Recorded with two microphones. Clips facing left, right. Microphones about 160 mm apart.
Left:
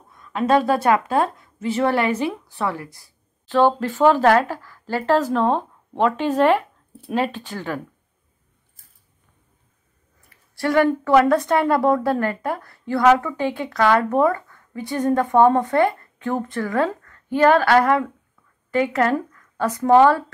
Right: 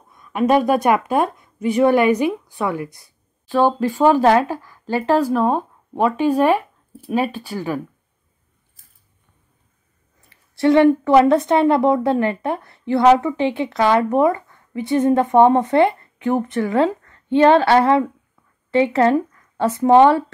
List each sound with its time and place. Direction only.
0.1 s a woman's voice: 15° right (ahead or behind)
10.3 s a sound: 25° right (ahead or behind)
10.9 s a woman's voice: 20° right (ahead or behind)